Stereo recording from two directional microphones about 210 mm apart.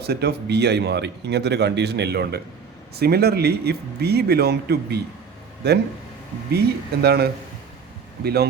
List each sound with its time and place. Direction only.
0.0 s speech: 50° right (ahead or behind)